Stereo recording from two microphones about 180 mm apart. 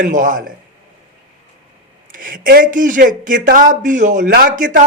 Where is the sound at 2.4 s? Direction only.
50° right (ahead or behind).